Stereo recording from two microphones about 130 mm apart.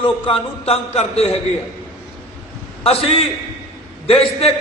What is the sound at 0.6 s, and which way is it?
Speech, 50° left (ahead or behind).